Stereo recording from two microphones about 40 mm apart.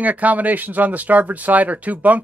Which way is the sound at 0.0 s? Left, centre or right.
Right.